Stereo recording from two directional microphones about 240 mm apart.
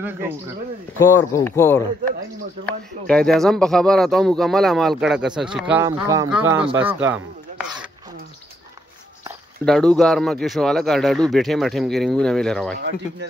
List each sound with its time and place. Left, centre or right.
0.9 s speech: centre
9.7 s speech: centre
12.7 s speech: right